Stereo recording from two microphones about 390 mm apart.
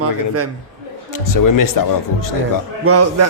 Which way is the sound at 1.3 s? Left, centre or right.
Left.